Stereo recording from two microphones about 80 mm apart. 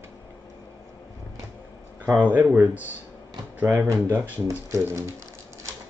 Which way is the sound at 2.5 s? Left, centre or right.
Right.